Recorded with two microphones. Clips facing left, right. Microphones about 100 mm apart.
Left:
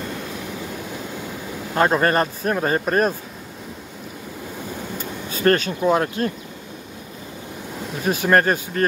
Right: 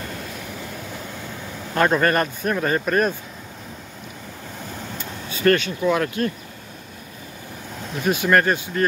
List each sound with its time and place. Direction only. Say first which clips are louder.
1.8 s speech: left 1 dB; 25° left (ahead or behind)
4.9 s speech: left 3 dB; 40° left (ahead or behind)
8.0 s speech: left 1 dB; 35° left (ahead or behind)